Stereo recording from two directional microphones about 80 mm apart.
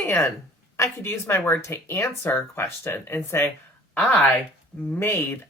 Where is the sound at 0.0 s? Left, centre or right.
Left.